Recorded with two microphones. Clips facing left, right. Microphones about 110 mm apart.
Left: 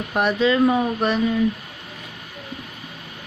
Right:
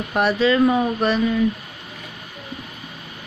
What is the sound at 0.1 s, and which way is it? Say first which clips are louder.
Speech: right 1 dB; 20° left (ahead or behind).